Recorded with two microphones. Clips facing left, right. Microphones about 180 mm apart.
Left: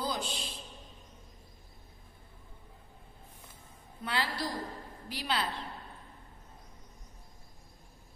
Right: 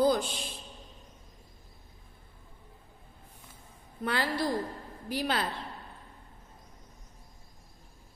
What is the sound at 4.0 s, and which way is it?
A woman's voice, 45° right (ahead or behind).